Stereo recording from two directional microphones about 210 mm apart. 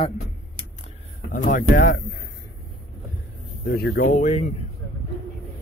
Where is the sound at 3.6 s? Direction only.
55° left (ahead or behind).